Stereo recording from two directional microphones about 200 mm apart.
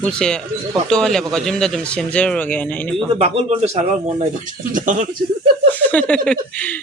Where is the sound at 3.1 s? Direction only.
30° right (ahead or behind).